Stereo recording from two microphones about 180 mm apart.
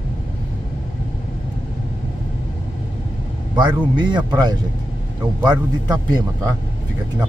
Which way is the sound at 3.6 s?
25° right (ahead or behind).